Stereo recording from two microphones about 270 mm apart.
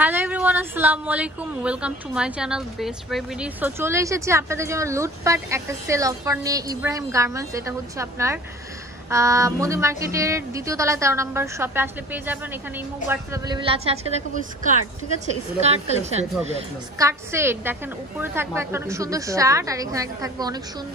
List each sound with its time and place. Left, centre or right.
0.0 s a woman's voice: centre; by 16.3 s right
17.0 s speech: centre